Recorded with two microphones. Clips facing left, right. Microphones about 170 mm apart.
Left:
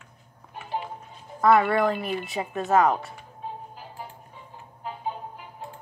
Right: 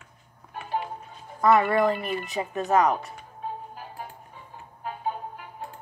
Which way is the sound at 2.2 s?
20° left (ahead or behind).